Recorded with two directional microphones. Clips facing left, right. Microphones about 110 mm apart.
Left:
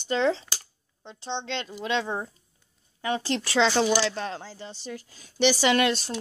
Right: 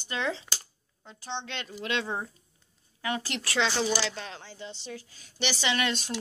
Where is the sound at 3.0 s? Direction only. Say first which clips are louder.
Left 5 dB; 25° left (ahead or behind).